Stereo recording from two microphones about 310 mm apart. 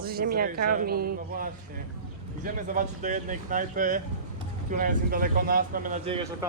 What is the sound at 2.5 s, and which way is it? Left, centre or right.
Speech, right.